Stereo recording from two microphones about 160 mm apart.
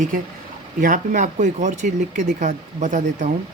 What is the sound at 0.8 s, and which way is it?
Speech, 55° right (ahead or behind).